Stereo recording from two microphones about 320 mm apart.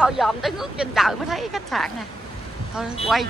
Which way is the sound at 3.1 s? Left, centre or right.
Centre.